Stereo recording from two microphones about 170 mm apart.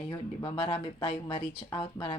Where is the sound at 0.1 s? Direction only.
30° left (ahead or behind).